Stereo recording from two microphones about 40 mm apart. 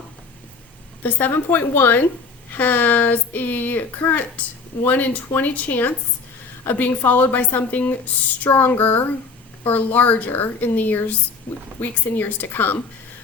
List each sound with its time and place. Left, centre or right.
1.3 s a woman's voice: left
2.5 s speech: left
8.4 s a woman's voice: left
8.8 s speech: left